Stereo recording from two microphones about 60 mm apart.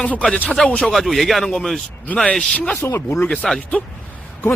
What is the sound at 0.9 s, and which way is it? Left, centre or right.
A man's voice, centre.